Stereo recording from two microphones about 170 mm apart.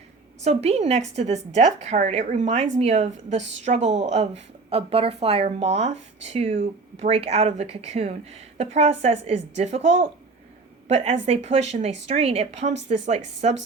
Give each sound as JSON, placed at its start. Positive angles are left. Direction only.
{"t": 0.4, "sound": "a woman's voice", "side_deg": -40}